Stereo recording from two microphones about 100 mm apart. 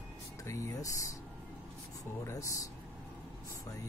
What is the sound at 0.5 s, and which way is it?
Speech, 30° left (ahead or behind).